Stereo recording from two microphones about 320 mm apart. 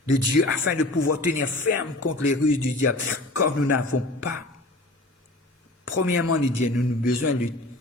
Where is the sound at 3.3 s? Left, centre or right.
Left.